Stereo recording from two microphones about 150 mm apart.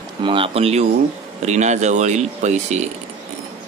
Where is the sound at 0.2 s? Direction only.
35° right (ahead or behind); by 2.9 s 50° right (ahead or behind).